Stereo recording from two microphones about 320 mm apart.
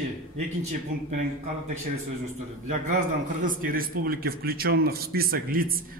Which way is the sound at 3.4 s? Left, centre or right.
Right.